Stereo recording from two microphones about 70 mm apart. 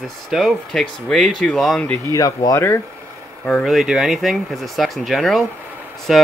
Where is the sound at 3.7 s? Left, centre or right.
Centre.